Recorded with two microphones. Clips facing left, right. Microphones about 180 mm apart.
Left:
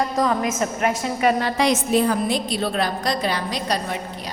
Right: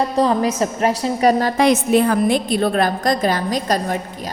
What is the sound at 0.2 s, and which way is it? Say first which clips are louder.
A woman's voice: right 6 dB; 35° right (ahead or behind).